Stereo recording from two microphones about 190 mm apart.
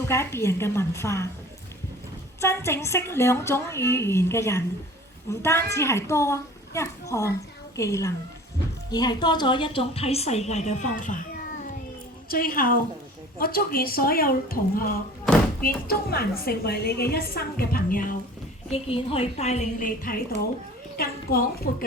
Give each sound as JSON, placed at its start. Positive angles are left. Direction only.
{"t": 0.1, "sound": "a woman's voice", "side_deg": 15}
{"t": 2.4, "sound": "a woman's voice", "side_deg": 15}
{"t": 12.3, "sound": "a woman's voice", "side_deg": 50}
{"t": 18.7, "sound": "a woman's voice", "side_deg": 30}